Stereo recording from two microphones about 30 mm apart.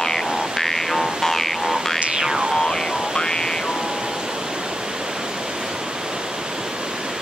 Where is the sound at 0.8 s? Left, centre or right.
Centre.